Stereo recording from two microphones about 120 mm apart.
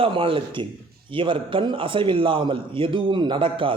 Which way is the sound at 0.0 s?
50° right (ahead or behind).